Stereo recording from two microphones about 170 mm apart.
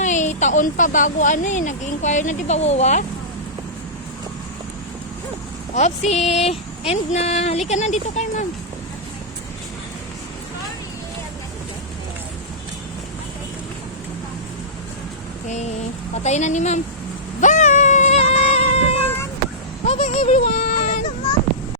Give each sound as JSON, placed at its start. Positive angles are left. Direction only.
{"t": 0.0, "sound": "speech", "side_deg": 45}
{"t": 5.7, "sound": "speech", "side_deg": 45}
{"t": 16.1, "sound": "speech", "side_deg": 40}
{"t": 17.4, "sound": "cat", "side_deg": 45}
{"t": 19.9, "sound": "music", "side_deg": 40}